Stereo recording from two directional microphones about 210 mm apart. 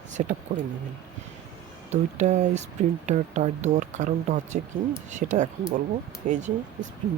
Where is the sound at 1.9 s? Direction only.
35° right (ahead or behind).